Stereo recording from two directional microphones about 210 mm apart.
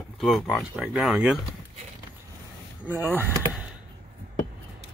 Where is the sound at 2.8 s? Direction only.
10° right (ahead or behind).